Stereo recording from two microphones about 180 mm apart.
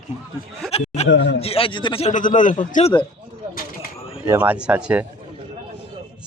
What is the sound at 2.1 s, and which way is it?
Speech, 45° left (ahead or behind).